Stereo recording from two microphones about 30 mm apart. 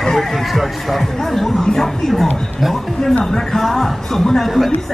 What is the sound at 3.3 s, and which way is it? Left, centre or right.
Speech, centre.